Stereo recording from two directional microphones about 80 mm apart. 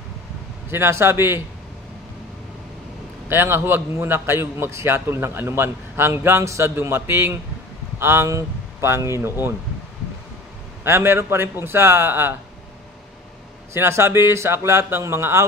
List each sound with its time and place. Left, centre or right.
0.7 s a man's voice: right
3.3 s a man's voice: right
10.8 s a man's voice: right
13.7 s a man's voice: right